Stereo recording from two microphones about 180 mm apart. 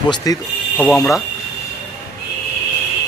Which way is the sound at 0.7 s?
5° left (ahead or behind).